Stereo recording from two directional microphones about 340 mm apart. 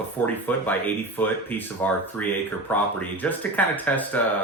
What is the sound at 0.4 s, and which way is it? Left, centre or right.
Speech, centre.